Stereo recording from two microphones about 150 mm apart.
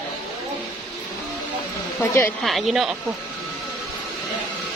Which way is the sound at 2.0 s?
15° left (ahead or behind).